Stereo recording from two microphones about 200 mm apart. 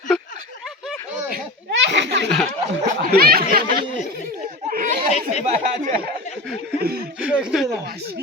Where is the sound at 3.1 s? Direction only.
50° right (ahead or behind).